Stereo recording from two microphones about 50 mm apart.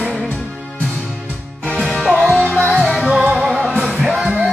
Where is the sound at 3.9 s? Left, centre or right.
Centre.